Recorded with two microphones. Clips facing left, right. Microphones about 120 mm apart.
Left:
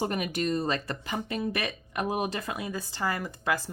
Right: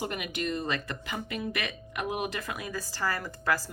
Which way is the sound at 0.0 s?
35° left (ahead or behind).